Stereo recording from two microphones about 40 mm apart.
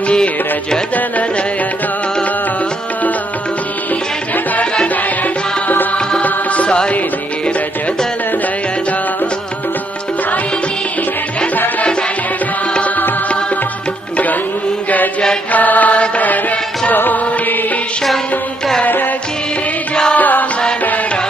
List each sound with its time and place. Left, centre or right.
6.2 s music: left
15.5 s mantra: left
16.9 s music: left
20.2 s music: left